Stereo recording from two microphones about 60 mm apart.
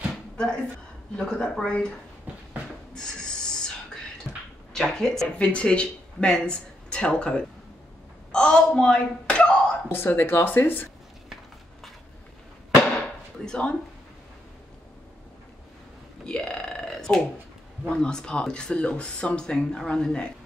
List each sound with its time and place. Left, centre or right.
1.1 s speech: centre
2.9 s a sound: centre
4.7 s speech: centre
5.4 s speech: centre
9.8 s speech: left
13.5 s speech: centre
16.3 s burping: centre
17.8 s speech: centre